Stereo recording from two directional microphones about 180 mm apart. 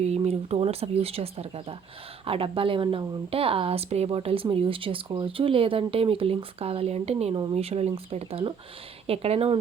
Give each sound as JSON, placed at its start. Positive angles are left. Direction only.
{"t": 0.0, "sound": "speech", "side_deg": -35}